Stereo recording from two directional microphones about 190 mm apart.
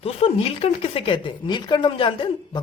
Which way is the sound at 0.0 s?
30° left (ahead or behind).